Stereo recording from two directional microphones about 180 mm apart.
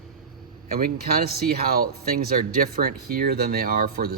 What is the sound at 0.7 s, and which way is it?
Speech, 55° right (ahead or behind).